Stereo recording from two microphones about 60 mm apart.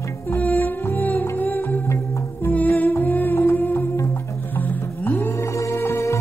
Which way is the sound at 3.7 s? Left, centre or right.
Left.